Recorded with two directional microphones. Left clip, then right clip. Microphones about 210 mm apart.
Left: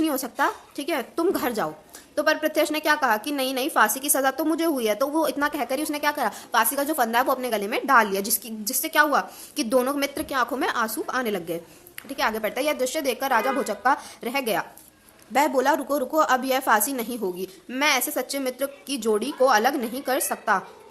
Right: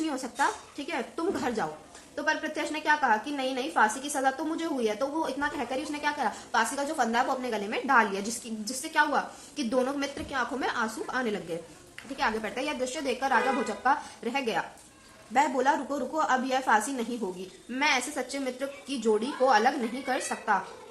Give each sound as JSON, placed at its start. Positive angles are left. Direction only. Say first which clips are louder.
{"t": 0.0, "sound": "a woman's voice", "louder": "left 5 dB", "side_deg": 55}